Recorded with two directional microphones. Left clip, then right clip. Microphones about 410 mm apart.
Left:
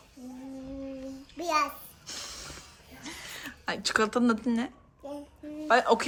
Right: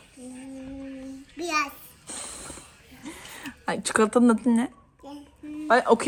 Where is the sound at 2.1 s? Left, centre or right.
Centre.